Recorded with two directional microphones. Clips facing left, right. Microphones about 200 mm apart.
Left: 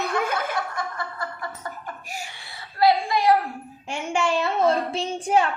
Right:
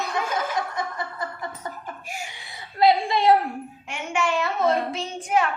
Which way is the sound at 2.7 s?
25° right (ahead or behind).